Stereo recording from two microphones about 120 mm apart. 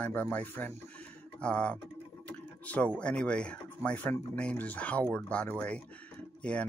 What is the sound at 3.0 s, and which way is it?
Speech, 10° left (ahead or behind).